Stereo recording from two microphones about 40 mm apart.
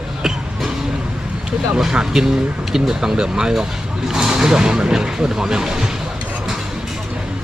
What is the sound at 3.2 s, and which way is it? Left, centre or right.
Speech, centre.